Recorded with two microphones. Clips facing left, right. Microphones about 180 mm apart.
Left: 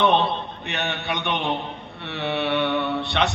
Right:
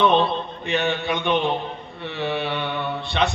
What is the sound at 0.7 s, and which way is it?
A man's voice, 70° left (ahead or behind).